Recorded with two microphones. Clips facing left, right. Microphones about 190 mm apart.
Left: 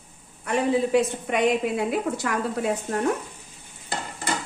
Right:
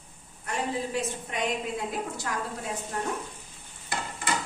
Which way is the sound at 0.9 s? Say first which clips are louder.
Left 10 dB; 70° left (ahead or behind).